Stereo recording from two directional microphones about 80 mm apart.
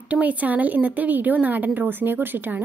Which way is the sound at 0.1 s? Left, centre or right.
Centre.